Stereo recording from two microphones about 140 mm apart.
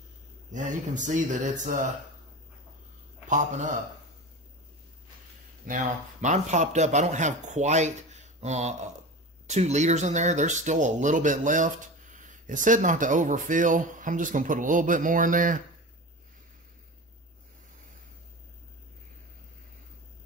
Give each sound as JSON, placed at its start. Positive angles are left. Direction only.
{"t": 0.5, "sound": "speech", "side_deg": -65}
{"t": 3.3, "sound": "speech", "side_deg": -65}
{"t": 6.2, "sound": "speech", "side_deg": -60}